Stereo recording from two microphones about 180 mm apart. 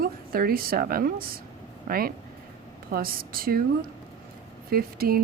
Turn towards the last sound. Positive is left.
turn(degrees=-55)  # may be behind; listen again after turning